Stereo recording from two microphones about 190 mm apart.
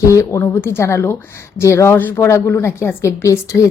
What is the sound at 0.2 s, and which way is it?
Speech, 15° left (ahead or behind).